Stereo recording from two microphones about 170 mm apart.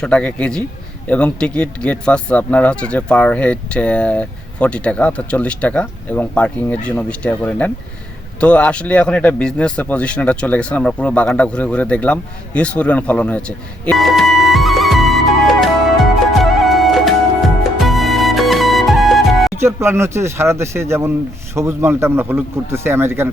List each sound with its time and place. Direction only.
0.0 s speech: 5° left (ahead or behind)
13.8 s music: centre (ahead or behind)
19.6 s speech: 15° right (ahead or behind)